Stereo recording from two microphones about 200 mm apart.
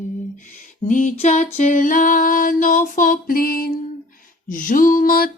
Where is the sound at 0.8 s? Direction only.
40° left (ahead or behind).